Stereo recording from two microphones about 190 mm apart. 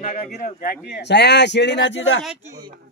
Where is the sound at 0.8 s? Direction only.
60° left (ahead or behind).